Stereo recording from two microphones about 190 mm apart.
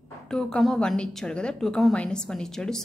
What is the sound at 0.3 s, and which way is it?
A woman's voice, centre (ahead or behind).